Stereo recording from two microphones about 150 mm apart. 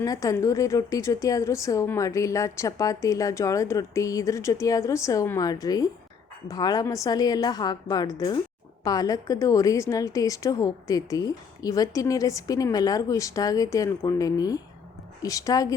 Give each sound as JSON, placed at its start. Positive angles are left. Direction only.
{"t": 0.0, "sound": "a woman's voice", "side_deg": 25}